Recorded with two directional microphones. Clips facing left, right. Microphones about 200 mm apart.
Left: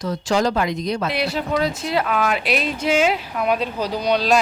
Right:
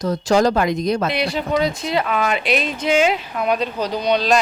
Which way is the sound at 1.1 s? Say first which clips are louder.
Right 2 dB; 5° left (ahead or behind).